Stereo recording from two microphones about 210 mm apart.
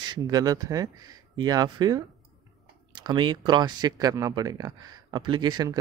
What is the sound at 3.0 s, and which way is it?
Speech, 20° right (ahead or behind).